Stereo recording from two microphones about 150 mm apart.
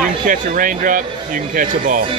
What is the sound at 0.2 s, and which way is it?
Speech, 65° right (ahead or behind).